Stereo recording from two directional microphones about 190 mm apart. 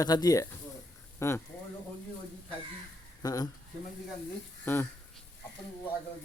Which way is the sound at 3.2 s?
20° left (ahead or behind).